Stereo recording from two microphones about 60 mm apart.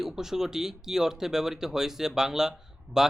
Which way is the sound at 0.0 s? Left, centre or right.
Centre.